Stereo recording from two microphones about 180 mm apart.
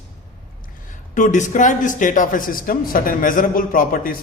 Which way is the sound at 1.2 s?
45° left (ahead or behind).